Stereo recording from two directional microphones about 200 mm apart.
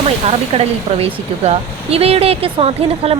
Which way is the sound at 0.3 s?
30° right (ahead or behind).